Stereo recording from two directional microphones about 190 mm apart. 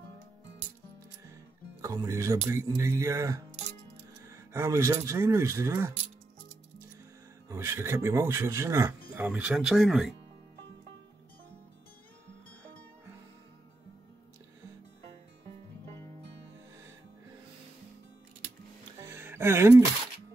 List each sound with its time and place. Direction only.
1.8 s speech: 15° right (ahead or behind)
7.4 s speech: 15° right (ahead or behind)
19.0 s music: 10° right (ahead or behind)